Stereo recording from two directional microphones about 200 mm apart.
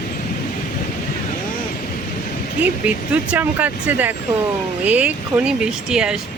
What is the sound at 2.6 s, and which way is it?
Speech, 5° right (ahead or behind).